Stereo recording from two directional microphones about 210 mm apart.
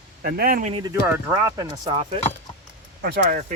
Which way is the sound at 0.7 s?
25° right (ahead or behind).